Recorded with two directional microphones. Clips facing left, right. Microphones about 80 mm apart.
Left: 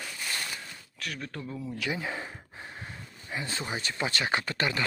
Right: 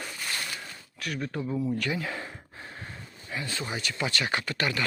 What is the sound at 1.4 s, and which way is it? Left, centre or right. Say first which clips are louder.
Speech: right 10 dB; centre.